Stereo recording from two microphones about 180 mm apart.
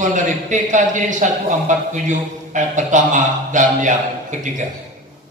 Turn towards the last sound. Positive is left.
turn(degrees=-45)  # may be behind; listen again after turning